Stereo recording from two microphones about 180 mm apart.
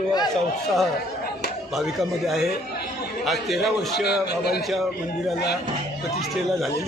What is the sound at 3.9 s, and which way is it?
Speech, 65° left (ahead or behind).